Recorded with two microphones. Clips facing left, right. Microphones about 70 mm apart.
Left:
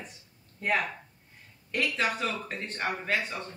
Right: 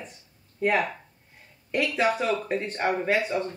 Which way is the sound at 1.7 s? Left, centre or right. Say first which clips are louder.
Right 5 dB; centre.